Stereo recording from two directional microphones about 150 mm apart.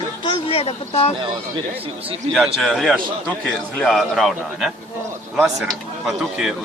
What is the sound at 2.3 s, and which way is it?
Speech, centre (ahead or behind).